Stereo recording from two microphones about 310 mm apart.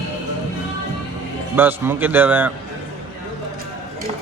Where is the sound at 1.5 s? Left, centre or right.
Centre.